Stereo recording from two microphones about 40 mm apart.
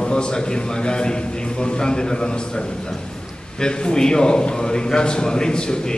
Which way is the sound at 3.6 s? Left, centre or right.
Centre.